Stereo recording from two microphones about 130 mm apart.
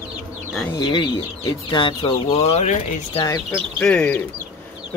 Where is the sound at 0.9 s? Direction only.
40° left (ahead or behind).